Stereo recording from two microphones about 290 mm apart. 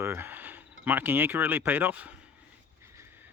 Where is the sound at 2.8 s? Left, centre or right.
Centre.